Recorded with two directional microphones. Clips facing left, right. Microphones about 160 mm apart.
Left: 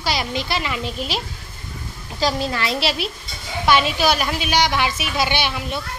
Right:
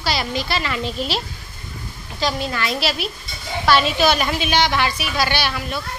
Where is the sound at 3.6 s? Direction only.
15° left (ahead or behind).